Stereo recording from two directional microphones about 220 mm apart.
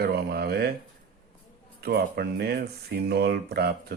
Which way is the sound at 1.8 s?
45° right (ahead or behind).